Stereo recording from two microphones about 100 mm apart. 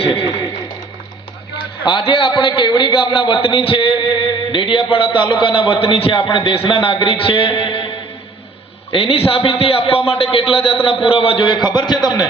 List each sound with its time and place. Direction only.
0.1 s speech: 50° left (ahead or behind)
1.8 s a man's voice: 55° left (ahead or behind)
8.9 s a man's voice: 70° left (ahead or behind); by 12.3 s 45° left (ahead or behind)